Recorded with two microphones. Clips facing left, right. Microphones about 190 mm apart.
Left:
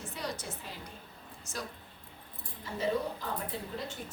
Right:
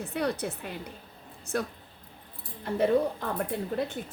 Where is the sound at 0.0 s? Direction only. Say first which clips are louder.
Right 9 dB; 60° right (ahead or behind).